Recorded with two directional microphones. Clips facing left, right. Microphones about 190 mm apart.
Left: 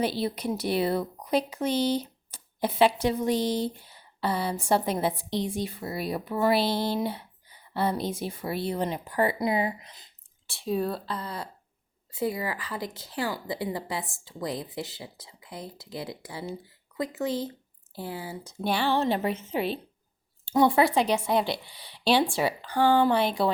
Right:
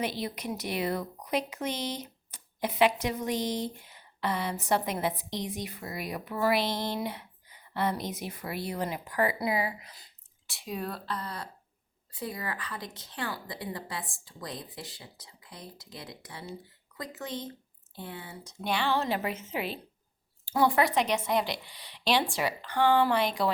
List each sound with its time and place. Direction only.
0.0 s speech: 30° left (ahead or behind)
20.5 s speech: 25° left (ahead or behind)